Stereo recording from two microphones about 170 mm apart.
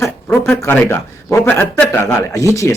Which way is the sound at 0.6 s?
15° left (ahead or behind).